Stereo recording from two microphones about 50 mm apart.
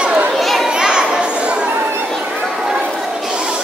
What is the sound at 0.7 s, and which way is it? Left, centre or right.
Children playing, centre.